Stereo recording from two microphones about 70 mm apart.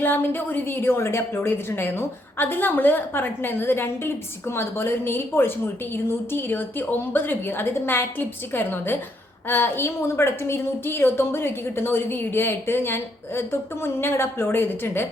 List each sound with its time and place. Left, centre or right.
0.0 s a woman's voice: left